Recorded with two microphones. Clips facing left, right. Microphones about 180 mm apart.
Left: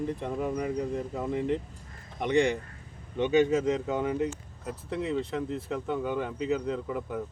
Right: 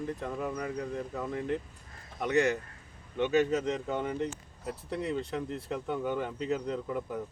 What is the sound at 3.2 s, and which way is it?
Speech, 10° left (ahead or behind).